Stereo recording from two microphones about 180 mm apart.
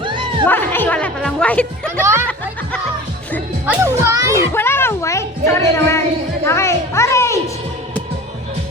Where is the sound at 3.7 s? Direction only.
15° right (ahead or behind).